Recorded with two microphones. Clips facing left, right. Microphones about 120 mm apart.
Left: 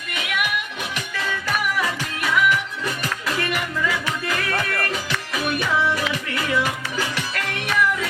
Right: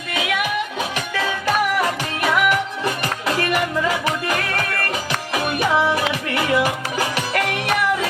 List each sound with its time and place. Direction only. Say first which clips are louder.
1.1 s music: right 5 dB; 65° right (ahead or behind); by 7.3 s 45° right (ahead or behind)
7.3 s music: right 9 dB; 65° right (ahead or behind)